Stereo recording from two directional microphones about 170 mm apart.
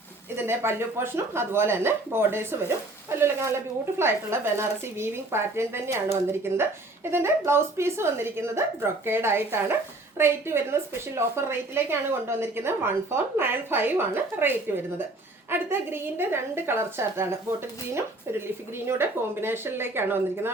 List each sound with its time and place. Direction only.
0.3 s speech: 15° right (ahead or behind)